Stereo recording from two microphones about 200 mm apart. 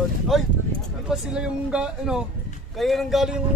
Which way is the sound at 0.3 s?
Centre (ahead or behind).